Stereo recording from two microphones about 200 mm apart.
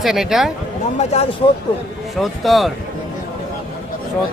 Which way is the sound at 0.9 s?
35° left (ahead or behind).